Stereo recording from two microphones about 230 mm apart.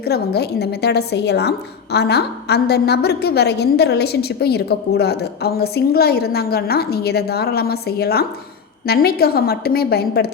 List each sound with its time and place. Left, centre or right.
0.0 s a woman's voice: left